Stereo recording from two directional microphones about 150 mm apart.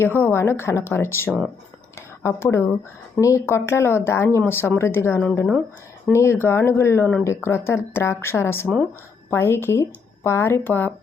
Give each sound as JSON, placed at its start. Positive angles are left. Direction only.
{"t": 0.0, "sound": "speech", "side_deg": 15}